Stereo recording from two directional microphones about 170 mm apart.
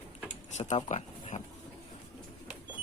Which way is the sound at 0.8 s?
45° left (ahead or behind).